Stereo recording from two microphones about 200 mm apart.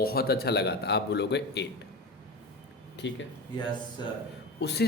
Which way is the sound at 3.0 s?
60° left (ahead or behind).